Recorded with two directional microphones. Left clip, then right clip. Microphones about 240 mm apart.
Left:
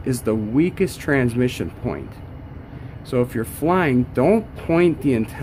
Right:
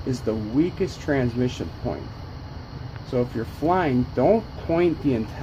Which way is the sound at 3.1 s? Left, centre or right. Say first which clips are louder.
Left 4 dB; left.